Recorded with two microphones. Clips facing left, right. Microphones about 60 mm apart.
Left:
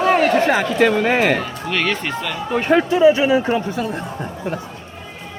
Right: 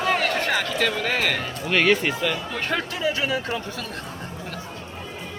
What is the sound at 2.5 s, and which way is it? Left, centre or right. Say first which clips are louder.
Speech: left 11 dB; left.